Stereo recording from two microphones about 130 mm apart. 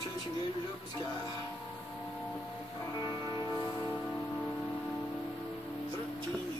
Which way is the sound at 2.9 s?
35° left (ahead or behind).